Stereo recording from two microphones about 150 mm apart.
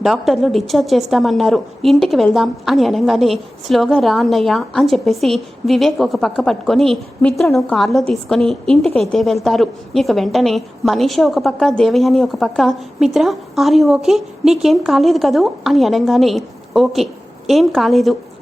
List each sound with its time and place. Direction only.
0.0 s a woman's voice: centre (ahead or behind)